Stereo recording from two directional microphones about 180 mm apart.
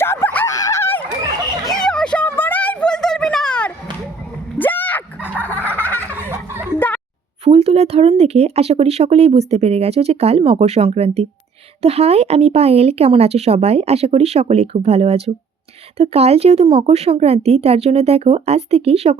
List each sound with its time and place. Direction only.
0.0 s honk: 15° left (ahead or behind)
1.7 s a sound: 5° left (ahead or behind)
7.4 s speech: 35° right (ahead or behind)